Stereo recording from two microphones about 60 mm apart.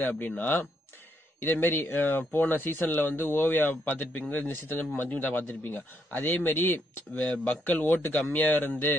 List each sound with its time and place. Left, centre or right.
0.0 s speech: left